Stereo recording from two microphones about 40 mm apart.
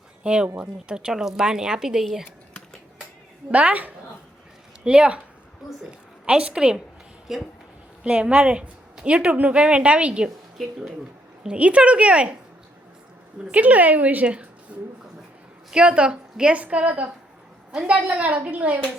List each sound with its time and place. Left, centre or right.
0.2 s speech: right
3.5 s speech: right
4.8 s a woman's voice: right
6.2 s a woman's voice: right
7.3 s speech: centre
8.0 s a woman's voice: right
10.6 s speech: centre
11.4 s speech: right
13.5 s a woman's voice: right
14.7 s a woman's voice: right
16.6 s speech: right